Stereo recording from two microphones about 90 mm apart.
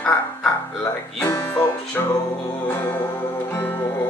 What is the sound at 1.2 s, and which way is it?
Music, 25° left (ahead or behind).